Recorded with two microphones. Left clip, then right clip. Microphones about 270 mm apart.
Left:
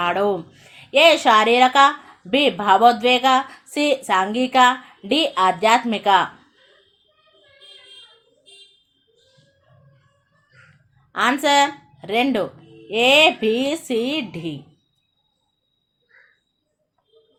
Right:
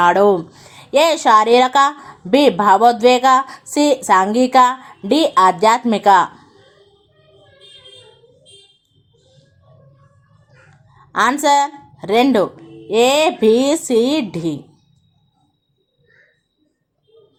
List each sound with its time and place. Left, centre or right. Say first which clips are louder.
0.0 s a woman's voice: right 8 dB; centre
11.1 s a woman's voice: right 4 dB; right